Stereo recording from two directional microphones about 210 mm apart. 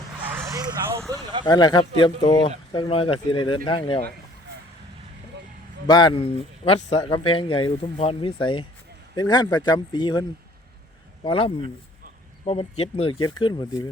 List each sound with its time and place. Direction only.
0.3 s vehicle: 15° right (ahead or behind)
1.1 s speech: 20° right (ahead or behind)
1.5 s speech: 20° left (ahead or behind)
5.9 s speech: 20° left (ahead or behind)